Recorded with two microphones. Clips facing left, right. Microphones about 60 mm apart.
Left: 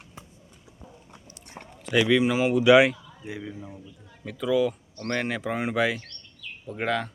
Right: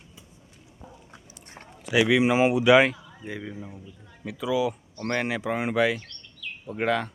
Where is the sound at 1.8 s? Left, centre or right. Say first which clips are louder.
Even; centre.